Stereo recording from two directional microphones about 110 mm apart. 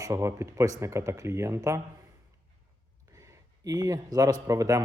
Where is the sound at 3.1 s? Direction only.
30° right (ahead or behind).